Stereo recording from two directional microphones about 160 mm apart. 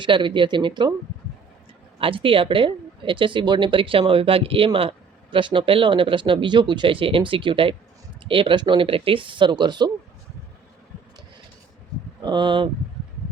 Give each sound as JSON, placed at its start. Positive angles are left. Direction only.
{"t": 0.0, "sound": "a woman's voice", "side_deg": -30}
{"t": 2.0, "sound": "a woman's voice", "side_deg": -35}
{"t": 12.2, "sound": "speech", "side_deg": -30}